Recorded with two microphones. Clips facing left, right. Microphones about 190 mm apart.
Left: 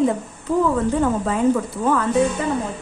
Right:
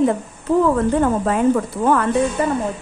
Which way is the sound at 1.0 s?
60° right (ahead or behind).